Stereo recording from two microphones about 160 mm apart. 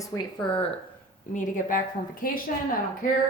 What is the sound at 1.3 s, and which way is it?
Speech, 55° left (ahead or behind).